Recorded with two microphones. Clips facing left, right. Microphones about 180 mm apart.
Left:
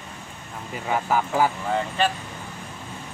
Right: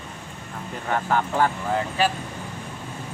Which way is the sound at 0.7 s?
5° left (ahead or behind).